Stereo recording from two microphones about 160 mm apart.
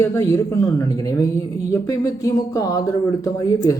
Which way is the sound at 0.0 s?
15° left (ahead or behind).